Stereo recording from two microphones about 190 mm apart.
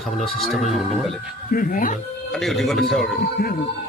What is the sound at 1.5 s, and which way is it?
Speech, 45° left (ahead or behind).